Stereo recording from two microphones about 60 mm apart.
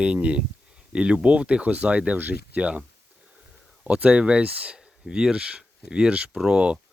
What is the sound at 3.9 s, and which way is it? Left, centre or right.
Speech, right.